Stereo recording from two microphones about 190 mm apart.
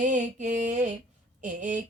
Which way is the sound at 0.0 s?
40° right (ahead or behind).